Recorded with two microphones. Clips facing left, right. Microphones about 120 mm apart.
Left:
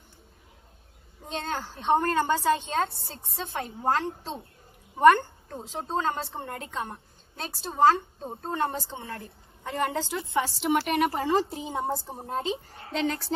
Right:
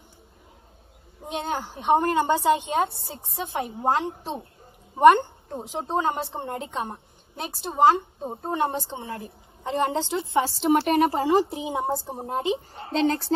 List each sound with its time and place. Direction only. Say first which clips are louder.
1.2 s a woman's voice: right 3 dB; 15° right (ahead or behind)